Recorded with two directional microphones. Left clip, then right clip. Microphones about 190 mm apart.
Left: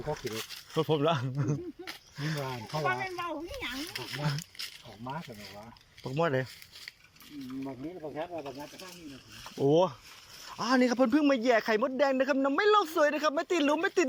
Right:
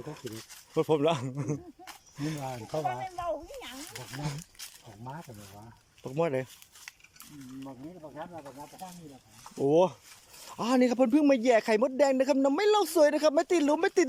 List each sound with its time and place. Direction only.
0.7 s speech: 20° right (ahead or behind)
3.8 s speech: 10° left (ahead or behind)
6.1 s speech: 20° right (ahead or behind)
9.6 s speech: 25° right (ahead or behind)